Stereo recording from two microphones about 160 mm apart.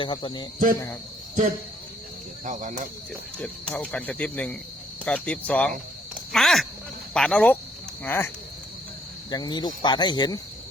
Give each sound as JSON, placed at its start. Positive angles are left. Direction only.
{"t": 0.0, "sound": "speech", "side_deg": 30}
{"t": 2.4, "sound": "speech", "side_deg": -50}
{"t": 3.3, "sound": "speech", "side_deg": 5}
{"t": 6.3, "sound": "a sound", "side_deg": 0}
{"t": 7.1, "sound": "speech", "side_deg": 5}
{"t": 9.3, "sound": "speech", "side_deg": 25}